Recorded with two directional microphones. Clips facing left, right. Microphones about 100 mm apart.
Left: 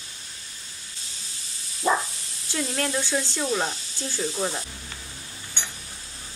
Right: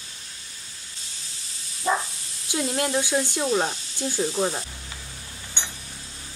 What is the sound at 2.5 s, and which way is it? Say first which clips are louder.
Speech: right 3 dB; 15° right (ahead or behind).